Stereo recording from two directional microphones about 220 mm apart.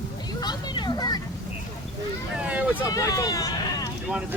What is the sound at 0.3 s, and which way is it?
Vehicle, 20° left (ahead or behind).